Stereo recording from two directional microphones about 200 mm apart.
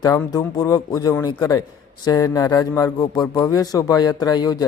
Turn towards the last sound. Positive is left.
turn(degrees=20)  # may be behind; listen again after turning